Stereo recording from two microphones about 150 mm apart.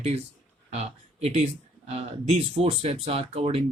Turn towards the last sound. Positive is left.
turn(degrees=-45)  # may be behind; listen again after turning